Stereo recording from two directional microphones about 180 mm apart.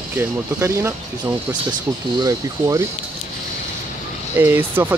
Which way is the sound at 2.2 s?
15° right (ahead or behind).